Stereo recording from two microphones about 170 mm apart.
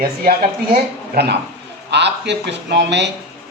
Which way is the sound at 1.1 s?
75° right (ahead or behind).